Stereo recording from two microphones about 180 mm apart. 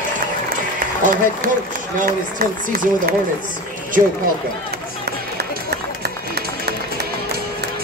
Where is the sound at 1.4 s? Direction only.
50° right (ahead or behind).